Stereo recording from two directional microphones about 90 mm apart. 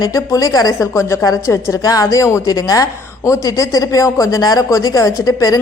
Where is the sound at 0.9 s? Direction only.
30° left (ahead or behind).